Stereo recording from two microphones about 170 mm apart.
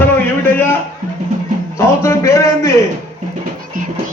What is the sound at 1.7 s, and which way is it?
Speech, 15° left (ahead or behind).